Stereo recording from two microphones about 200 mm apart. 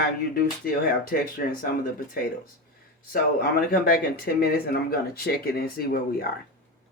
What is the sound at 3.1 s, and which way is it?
Speech, 50° left (ahead or behind).